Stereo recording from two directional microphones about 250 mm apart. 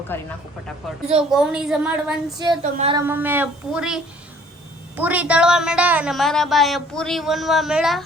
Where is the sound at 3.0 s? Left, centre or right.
Centre.